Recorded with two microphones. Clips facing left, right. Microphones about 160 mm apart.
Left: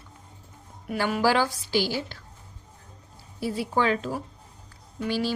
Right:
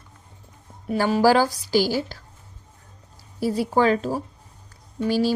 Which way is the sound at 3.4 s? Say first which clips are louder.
Right 5 dB; 40° right (ahead or behind).